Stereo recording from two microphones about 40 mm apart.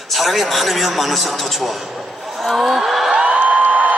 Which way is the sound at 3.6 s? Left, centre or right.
Right.